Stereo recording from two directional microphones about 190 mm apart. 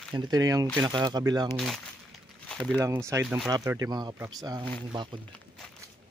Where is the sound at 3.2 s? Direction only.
Centre (ahead or behind).